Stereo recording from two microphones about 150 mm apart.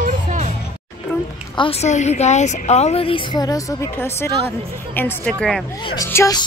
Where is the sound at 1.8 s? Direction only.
50° left (ahead or behind); by 6.3 s 20° left (ahead or behind).